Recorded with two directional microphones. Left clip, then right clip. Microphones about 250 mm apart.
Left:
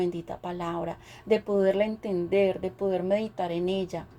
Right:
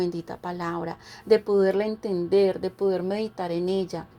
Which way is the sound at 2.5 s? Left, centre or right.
Right.